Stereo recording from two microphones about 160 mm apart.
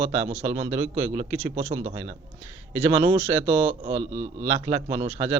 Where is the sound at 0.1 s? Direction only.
40° right (ahead or behind).